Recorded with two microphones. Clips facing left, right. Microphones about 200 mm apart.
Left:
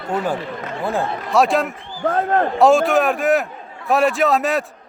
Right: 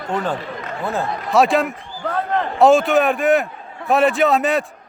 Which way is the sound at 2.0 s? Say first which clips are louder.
Left 4 dB; 45° left (ahead or behind).